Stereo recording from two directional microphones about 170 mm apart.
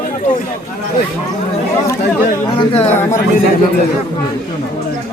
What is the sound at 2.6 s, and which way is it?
Speech, 35° left (ahead or behind).